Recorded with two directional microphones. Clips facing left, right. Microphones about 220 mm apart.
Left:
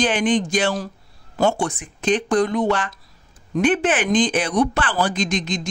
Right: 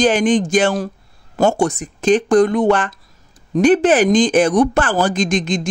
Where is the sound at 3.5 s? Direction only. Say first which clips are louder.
Right 7 dB; 40° right (ahead or behind).